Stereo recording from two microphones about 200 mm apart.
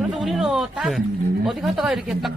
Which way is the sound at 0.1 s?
Centre (ahead or behind).